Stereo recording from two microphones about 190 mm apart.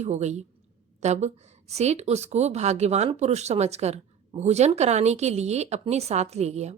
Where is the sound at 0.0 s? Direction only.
35° right (ahead or behind).